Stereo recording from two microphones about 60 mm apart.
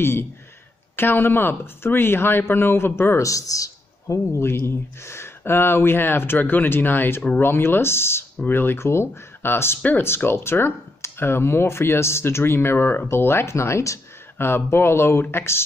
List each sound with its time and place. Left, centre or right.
0.0 s a man's voice: left
3.2 s a man's voice: left
9.8 s speech: left
10.0 s speech: left